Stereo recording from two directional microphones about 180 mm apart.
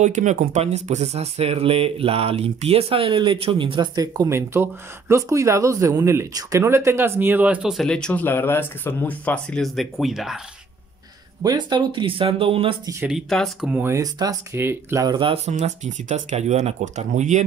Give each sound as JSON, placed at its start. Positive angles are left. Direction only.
{"t": 0.0, "sound": "speech", "side_deg": -45}
{"t": 11.4, "sound": "speech", "side_deg": -25}
{"t": 13.0, "sound": "speech", "side_deg": 0}